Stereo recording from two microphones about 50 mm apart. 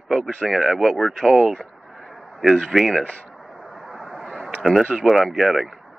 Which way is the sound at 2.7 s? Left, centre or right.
Centre.